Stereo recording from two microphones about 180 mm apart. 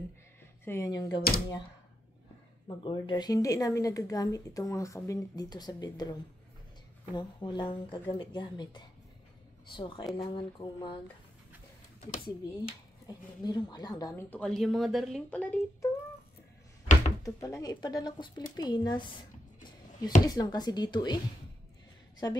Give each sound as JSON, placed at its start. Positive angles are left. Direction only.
{"t": 0.7, "sound": "speech", "side_deg": 20}
{"t": 2.8, "sound": "a woman's voice", "side_deg": 25}
{"t": 7.2, "sound": "a woman's voice", "side_deg": 25}
{"t": 12.3, "sound": "a woman's voice", "side_deg": 25}
{"t": 14.3, "sound": "speech", "side_deg": 0}
{"t": 16.8, "sound": "door", "side_deg": 45}
{"t": 17.2, "sound": "a woman's voice", "side_deg": 20}